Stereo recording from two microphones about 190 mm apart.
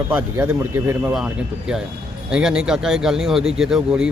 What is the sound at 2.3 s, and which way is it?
Speech, 5° right (ahead or behind).